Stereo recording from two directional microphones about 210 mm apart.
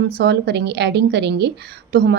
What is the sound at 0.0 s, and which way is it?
A woman's voice, 50° right (ahead or behind).